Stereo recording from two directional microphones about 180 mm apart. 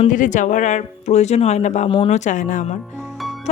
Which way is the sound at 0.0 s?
45° left (ahead or behind).